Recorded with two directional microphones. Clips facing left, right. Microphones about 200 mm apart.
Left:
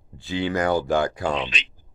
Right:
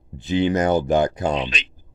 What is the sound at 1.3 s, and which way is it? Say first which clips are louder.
Speech: right 3 dB; 40° right (ahead or behind).